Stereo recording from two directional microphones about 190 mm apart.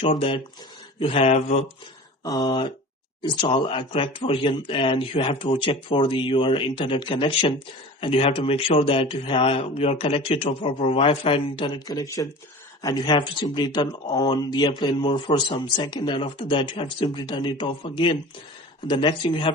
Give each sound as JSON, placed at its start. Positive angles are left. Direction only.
{"t": 0.0, "sound": "speech", "side_deg": 25}
{"t": 2.2, "sound": "speech", "side_deg": 20}